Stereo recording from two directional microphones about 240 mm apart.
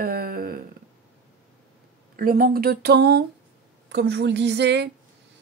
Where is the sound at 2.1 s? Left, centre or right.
Right.